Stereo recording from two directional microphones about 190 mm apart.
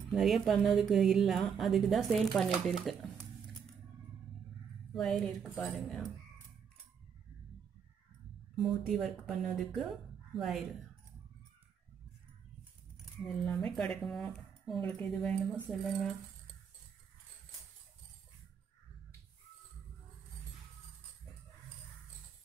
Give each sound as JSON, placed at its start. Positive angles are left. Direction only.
{"t": 0.1, "sound": "a woman's voice", "side_deg": 0}
{"t": 4.9, "sound": "a woman's voice", "side_deg": 0}
{"t": 8.5, "sound": "a woman's voice", "side_deg": 0}
{"t": 13.2, "sound": "a woman's voice", "side_deg": 5}